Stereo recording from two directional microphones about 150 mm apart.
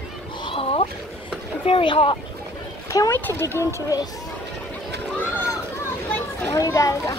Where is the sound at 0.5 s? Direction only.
40° left (ahead or behind).